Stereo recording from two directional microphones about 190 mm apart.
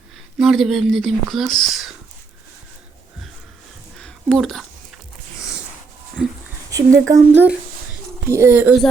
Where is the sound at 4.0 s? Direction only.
5° left (ahead or behind).